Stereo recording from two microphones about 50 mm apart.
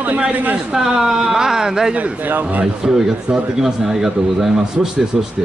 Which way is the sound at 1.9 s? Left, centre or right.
Right.